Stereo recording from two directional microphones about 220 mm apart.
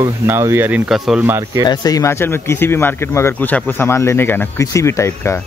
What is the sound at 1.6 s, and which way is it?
Speech, 15° left (ahead or behind).